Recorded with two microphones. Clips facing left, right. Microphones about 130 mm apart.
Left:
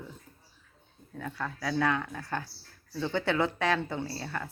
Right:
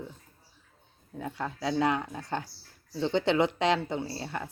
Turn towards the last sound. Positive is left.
turn(degrees=-20)  # may be behind; listen again after turning